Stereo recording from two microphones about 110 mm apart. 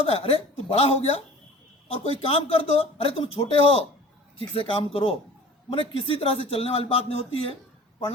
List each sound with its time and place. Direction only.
0.0 s speech: 65° left (ahead or behind)